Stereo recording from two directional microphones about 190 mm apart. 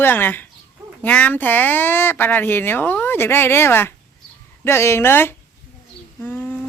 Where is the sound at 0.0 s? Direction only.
10° left (ahead or behind).